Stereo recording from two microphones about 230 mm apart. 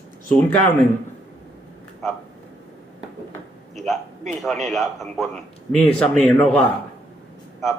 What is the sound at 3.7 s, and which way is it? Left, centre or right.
A man's voice, centre.